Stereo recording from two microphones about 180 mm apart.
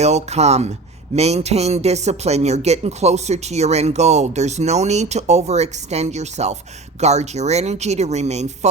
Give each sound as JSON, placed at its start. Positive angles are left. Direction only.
{"t": 0.0, "sound": "speech", "side_deg": -35}